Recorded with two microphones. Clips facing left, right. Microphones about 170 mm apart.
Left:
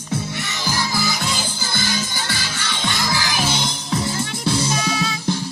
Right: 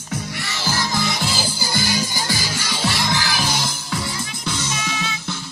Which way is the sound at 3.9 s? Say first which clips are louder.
Left 4 dB; 30° left (ahead or behind).